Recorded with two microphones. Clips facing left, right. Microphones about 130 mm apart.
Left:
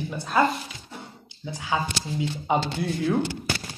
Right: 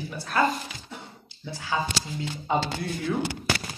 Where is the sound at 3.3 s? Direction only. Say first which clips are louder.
Right 1 dB; 90° right.